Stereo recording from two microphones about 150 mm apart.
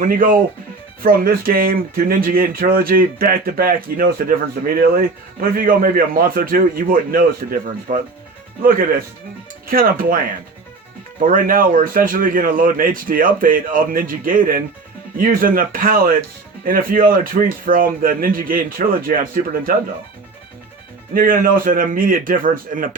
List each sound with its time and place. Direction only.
0.0 s speech: 70° right (ahead or behind)
7.9 s speech: 60° right (ahead or behind)
8.6 s speech: 70° right (ahead or behind)
11.2 s speech: 65° right (ahead or behind)
21.1 s speech: 70° right (ahead or behind)